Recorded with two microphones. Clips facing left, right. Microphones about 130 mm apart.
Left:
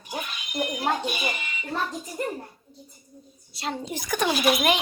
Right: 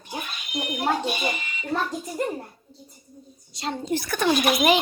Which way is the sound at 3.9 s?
15° left (ahead or behind).